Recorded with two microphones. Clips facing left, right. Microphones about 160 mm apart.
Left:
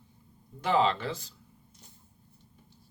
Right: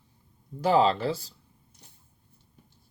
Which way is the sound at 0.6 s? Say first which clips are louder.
Right 4 dB; 35° right (ahead or behind).